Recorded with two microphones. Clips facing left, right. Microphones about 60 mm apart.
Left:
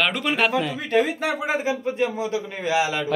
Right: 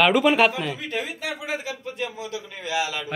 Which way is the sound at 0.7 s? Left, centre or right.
Left.